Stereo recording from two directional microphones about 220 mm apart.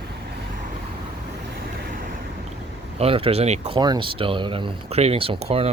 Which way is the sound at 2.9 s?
25° right (ahead or behind).